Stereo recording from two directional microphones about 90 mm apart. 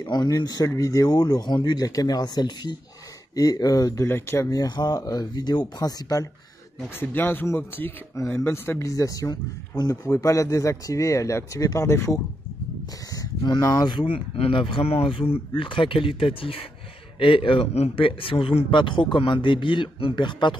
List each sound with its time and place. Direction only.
0.0 s speech: 50° left (ahead or behind); by 4.5 s 30° left (ahead or behind)
4.5 s speech: 50° left (ahead or behind)
7.0 s speech: 20° left (ahead or behind)
13.1 s a sound: 40° left (ahead or behind)
13.8 s speech: 70° left (ahead or behind); by 16.6 s 90° left
17.2 s speech: 75° left (ahead or behind); by 20.5 s 60° left (ahead or behind)